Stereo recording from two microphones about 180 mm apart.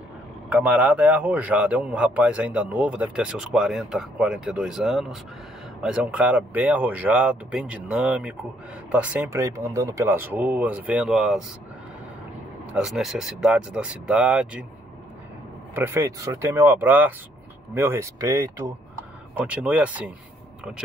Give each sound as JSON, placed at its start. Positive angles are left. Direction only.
{"t": 0.5, "sound": "a man's voice", "side_deg": -10}
{"t": 12.7, "sound": "speech", "side_deg": 0}
{"t": 15.7, "sound": "a man's voice", "side_deg": -15}